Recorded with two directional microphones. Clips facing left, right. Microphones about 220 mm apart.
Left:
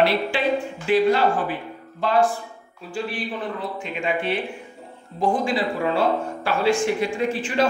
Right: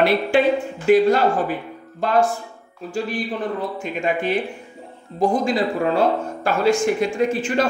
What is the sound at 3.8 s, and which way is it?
A man's voice, 45° right (ahead or behind).